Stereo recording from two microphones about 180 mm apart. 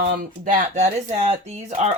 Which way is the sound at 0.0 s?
45° right (ahead or behind).